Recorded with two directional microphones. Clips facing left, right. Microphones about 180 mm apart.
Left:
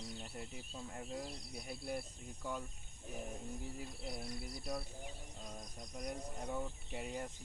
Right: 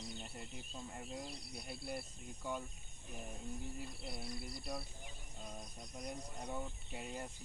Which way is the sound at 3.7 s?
Centre (ahead or behind).